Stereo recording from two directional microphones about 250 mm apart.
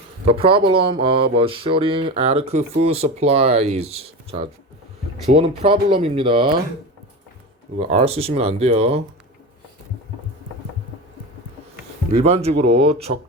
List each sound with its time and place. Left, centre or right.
0.3 s speech: right
7.8 s speech: right
12.1 s speech: right